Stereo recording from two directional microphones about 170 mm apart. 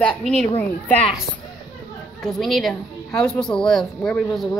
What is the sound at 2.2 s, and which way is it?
A woman's voice, centre (ahead or behind).